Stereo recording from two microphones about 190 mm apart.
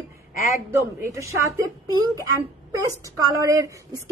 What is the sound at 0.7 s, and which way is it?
Speech, 15° right (ahead or behind).